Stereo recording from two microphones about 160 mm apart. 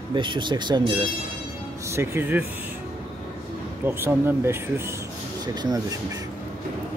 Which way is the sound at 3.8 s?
15° right (ahead or behind).